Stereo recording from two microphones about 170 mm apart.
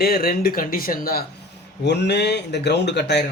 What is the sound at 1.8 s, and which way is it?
Speech, 85° left.